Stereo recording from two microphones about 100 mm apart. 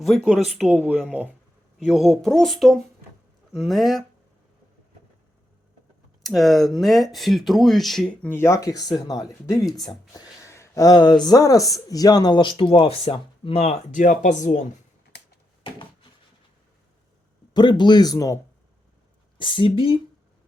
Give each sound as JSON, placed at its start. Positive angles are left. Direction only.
{"t": 0.3, "sound": "speech", "side_deg": -5}
{"t": 6.2, "sound": "speech", "side_deg": 0}
{"t": 8.2, "sound": "speech", "side_deg": 20}
{"t": 9.7, "sound": "speech", "side_deg": 5}
{"t": 10.4, "sound": "speech", "side_deg": 30}
{"t": 17.5, "sound": "speech", "side_deg": 50}
{"t": 19.4, "sound": "speech", "side_deg": 55}